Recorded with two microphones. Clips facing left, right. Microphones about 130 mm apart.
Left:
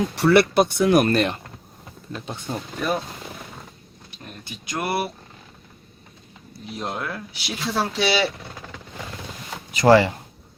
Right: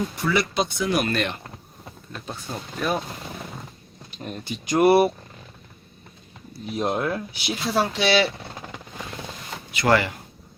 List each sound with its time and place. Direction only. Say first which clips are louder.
0.2 s speech: left 9 dB; 70° left (ahead or behind)
1.1 s speech: left 5 dB; 35° left (ahead or behind)
2.3 s speech: left 2 dB; centre (ahead or behind)
4.7 s speech: right 10 dB; 15° right (ahead or behind)
6.7 s speech: right 5 dB; 20° right (ahead or behind)
7.8 s speech: right 2 dB; 5° left (ahead or behind)
9.7 s speech: left 6 dB; 30° left (ahead or behind)